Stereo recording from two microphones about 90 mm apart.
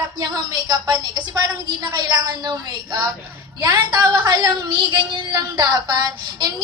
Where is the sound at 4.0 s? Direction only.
55° right (ahead or behind).